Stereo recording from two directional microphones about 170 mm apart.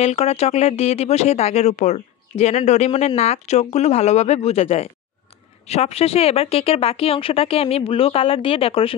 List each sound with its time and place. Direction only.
0.0 s speech: 40° left (ahead or behind)